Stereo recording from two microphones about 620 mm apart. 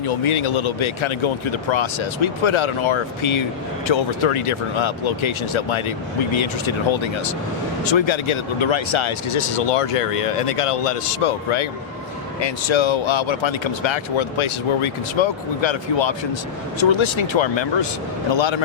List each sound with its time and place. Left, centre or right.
0.3 s speech: left
6.9 s speech: left